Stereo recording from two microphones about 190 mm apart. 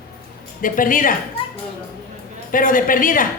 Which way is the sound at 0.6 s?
45° left (ahead or behind).